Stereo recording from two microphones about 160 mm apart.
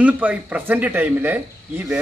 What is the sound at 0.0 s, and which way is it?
Speech, 10° right (ahead or behind).